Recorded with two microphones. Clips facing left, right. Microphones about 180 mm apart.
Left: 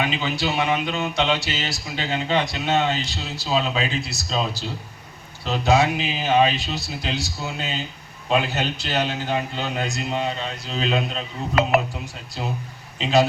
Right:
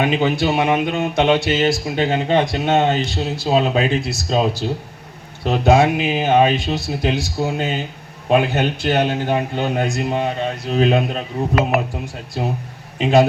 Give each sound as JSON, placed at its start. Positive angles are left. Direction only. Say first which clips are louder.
{"t": 0.0, "sound": "speech", "louder": "right 7 dB", "side_deg": -50}